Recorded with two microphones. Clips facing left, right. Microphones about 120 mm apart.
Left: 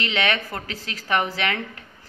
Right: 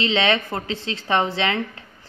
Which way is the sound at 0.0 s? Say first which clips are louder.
Right 4 dB; 25° right (ahead or behind).